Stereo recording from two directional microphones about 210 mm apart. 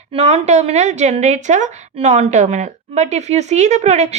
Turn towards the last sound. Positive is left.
turn(degrees=-30)  # may be behind; listen again after turning